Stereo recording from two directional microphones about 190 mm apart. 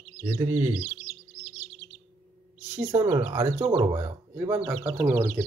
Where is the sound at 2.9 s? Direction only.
20° right (ahead or behind).